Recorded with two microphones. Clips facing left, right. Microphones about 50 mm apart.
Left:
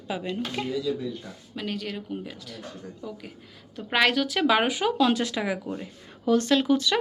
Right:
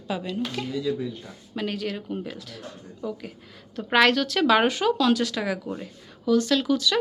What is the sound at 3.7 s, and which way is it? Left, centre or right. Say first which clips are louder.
Speech: right 3 dB; centre.